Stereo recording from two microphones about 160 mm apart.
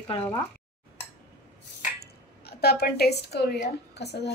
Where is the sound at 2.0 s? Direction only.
80° left.